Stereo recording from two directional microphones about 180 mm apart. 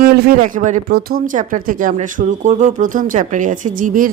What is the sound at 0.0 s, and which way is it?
Speech, 55° right (ahead or behind).